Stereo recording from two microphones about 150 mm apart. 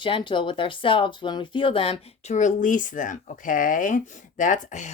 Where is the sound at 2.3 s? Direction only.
55° left (ahead or behind).